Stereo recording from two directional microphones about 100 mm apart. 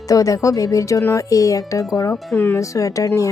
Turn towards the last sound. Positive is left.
turn(degrees=35)  # may be behind; listen again after turning